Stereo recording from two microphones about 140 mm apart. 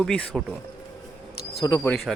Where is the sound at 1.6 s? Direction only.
30° left (ahead or behind).